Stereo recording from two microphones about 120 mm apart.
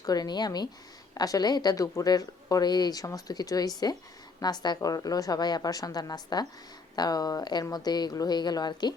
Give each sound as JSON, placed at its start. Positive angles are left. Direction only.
{"t": 0.0, "sound": "speech", "side_deg": 35}